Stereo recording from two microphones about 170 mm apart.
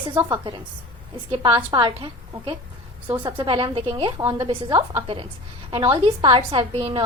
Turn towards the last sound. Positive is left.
turn(degrees=-35)  # may be behind; listen again after turning